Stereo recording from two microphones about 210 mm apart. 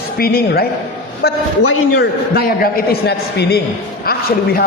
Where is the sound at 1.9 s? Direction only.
45° left (ahead or behind).